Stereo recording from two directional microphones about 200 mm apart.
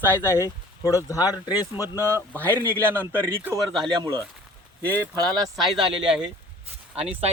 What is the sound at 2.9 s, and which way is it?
Speech, 10° right (ahead or behind).